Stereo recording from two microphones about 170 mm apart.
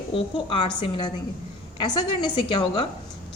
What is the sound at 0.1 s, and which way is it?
Speech, 30° left (ahead or behind).